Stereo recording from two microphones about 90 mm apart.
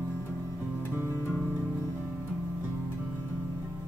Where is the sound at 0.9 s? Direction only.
30° right (ahead or behind).